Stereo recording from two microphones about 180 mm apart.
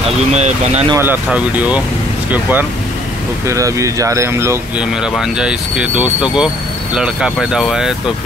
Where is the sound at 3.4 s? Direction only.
15° right (ahead or behind).